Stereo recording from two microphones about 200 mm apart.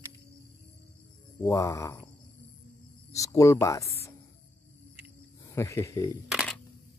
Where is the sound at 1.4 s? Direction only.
15° left (ahead or behind).